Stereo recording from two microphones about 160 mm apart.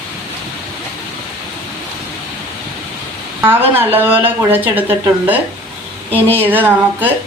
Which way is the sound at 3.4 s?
15° right (ahead or behind).